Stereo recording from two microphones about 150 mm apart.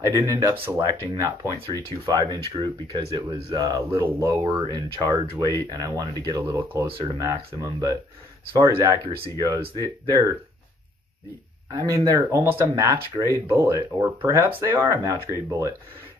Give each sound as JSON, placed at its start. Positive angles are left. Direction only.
{"t": 0.0, "sound": "speech", "side_deg": -20}
{"t": 3.6, "sound": "speech", "side_deg": -25}
{"t": 4.0, "sound": "speech", "side_deg": -15}
{"t": 4.5, "sound": "speech", "side_deg": -25}
{"t": 11.7, "sound": "speech", "side_deg": -25}